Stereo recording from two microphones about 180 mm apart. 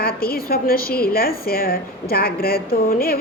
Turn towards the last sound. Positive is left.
turn(degrees=55)  # may be behind; listen again after turning